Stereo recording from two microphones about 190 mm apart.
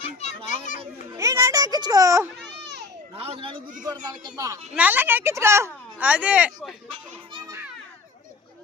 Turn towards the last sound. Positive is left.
turn(degrees=-25)  # may be behind; listen again after turning